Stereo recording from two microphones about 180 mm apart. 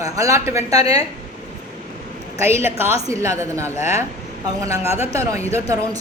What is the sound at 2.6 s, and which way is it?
A woman's voice, 15° right (ahead or behind).